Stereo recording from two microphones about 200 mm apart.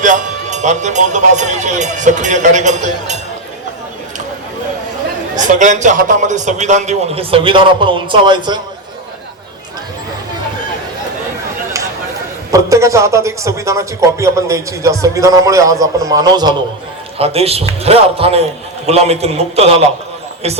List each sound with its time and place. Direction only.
0.0 s a man's voice: 35° right (ahead or behind)
5.4 s a man's voice: 40° right (ahead or behind); by 8.6 s 20° right (ahead or behind)
12.5 s a man's voice: 15° right (ahead or behind)
17.2 s a man's voice: 30° right (ahead or behind)